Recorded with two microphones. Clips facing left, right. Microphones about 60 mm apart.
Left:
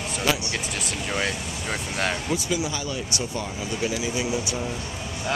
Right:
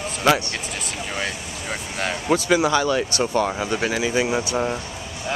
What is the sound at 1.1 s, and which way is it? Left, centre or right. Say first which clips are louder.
Speech: left 2 dB; centre.